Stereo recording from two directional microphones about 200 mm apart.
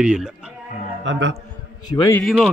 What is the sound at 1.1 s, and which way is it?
Speech, 65° right (ahead or behind).